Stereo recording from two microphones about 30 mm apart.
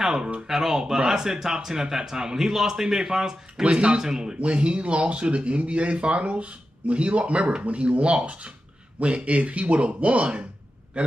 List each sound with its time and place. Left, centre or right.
0.0 s a sound: right
0.5 s speech: centre
3.6 s speech: right
4.0 s speech: right
4.4 s speech: right